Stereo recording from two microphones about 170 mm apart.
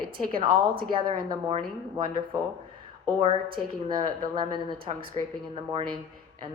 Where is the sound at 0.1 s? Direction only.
60° right (ahead or behind).